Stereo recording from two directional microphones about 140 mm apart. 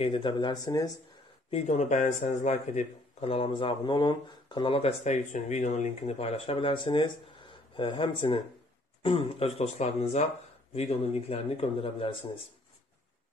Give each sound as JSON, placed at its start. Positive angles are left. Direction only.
{"t": 0.0, "sound": "speech", "side_deg": 40}
{"t": 1.5, "sound": "speech", "side_deg": 55}
{"t": 10.7, "sound": "speech", "side_deg": 45}